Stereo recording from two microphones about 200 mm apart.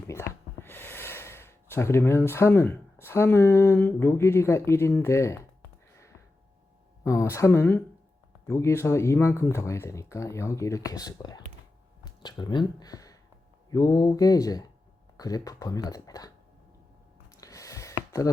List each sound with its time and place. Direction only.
0.1 s speech: 10° left (ahead or behind)
7.0 s speech: 15° left (ahead or behind)
17.3 s a sound: 15° left (ahead or behind)